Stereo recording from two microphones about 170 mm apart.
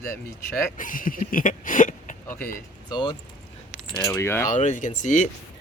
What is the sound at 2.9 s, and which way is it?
Speech, 30° left (ahead or behind).